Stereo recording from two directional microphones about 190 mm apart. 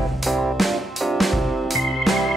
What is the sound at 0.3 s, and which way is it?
Music, centre (ahead or behind).